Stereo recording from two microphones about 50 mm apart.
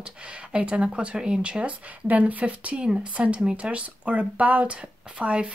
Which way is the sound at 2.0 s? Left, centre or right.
Right.